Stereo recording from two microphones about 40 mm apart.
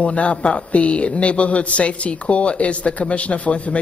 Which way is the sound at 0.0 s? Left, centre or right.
Left.